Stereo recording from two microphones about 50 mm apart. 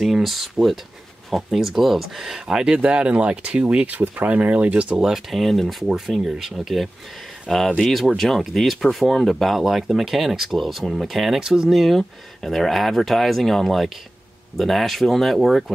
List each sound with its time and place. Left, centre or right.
0.0 s speech: centre; by 5.0 s right
5.0 s speech: centre